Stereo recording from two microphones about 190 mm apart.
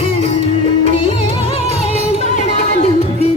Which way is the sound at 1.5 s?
35° left (ahead or behind).